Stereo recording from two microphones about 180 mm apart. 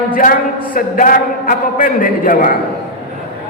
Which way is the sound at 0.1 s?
50° left (ahead or behind).